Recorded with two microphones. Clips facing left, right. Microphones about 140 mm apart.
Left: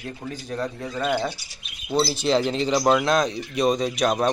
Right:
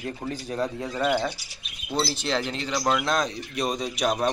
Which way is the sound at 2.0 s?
15° left (ahead or behind).